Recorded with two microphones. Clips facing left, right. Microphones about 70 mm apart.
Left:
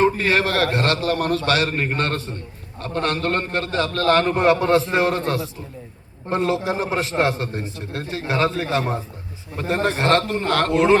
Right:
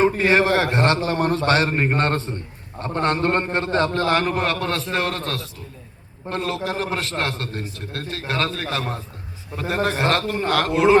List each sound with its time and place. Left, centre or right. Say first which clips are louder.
0.0 s a man's voice: right 1 dB; centre
4.0 s a man's voice: left 3 dB; centre
4.3 s a man's voice: left 6 dB; centre